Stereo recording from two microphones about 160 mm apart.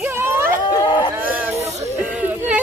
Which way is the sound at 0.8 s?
30° left (ahead or behind).